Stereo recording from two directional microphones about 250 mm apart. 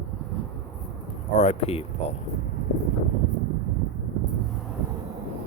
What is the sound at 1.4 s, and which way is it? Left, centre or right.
Speech, left.